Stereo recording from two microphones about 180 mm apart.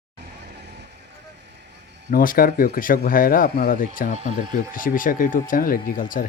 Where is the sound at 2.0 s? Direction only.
50° left (ahead or behind).